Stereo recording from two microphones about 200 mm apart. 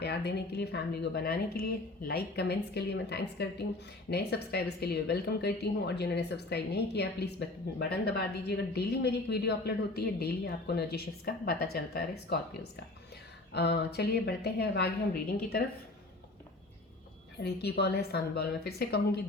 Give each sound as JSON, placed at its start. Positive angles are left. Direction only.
{"t": 0.0, "sound": "speech", "side_deg": 55}
{"t": 13.5, "sound": "speech", "side_deg": 55}
{"t": 17.4, "sound": "a woman's voice", "side_deg": 55}